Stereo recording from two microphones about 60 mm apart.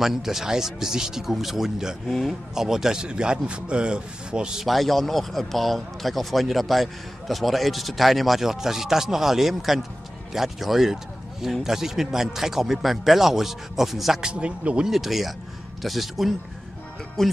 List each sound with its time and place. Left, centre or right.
0.0 s a man's voice: centre
2.0 s a man's voice: centre
2.5 s a man's voice: centre
4.6 s a man's voice: centre
14.3 s a man's voice: centre
14.9 s a man's voice: centre